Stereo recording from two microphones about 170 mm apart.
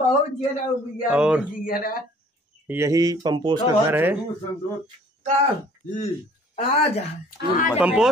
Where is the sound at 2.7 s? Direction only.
15° right (ahead or behind).